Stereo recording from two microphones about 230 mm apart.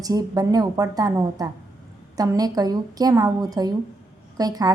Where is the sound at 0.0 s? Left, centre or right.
Centre.